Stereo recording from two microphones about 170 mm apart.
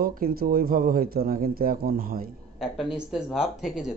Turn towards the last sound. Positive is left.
turn(degrees=-5)  # may be behind; listen again after turning